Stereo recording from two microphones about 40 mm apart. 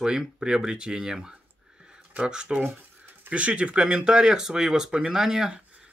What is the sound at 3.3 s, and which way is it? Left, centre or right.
Speech, right.